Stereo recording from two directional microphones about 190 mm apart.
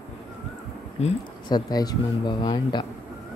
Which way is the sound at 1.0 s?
35° left (ahead or behind).